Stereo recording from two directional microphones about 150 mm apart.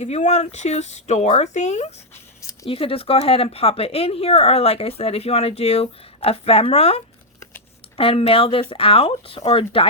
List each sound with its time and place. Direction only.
0.0 s speech: 50° left (ahead or behind)